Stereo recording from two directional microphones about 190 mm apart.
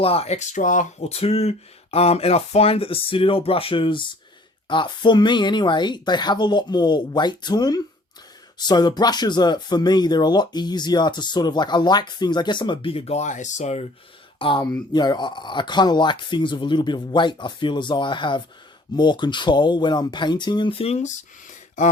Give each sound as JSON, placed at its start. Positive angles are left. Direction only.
{"t": 0.0, "sound": "speech", "side_deg": 30}